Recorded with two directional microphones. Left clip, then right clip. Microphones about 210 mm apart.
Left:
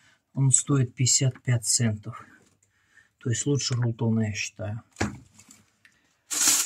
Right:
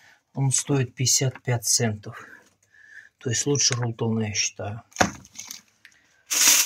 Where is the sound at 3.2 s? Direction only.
40° left (ahead or behind).